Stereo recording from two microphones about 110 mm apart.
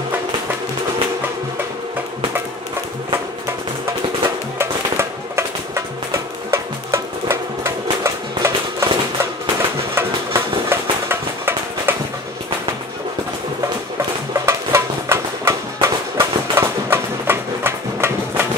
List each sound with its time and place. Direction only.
4.6 s music: 25° right (ahead or behind)
9.9 s a sound: 20° right (ahead or behind)
14.4 s music: 25° right (ahead or behind)